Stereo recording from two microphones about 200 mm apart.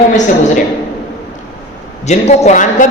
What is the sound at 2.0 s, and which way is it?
Speech, 35° left (ahead or behind).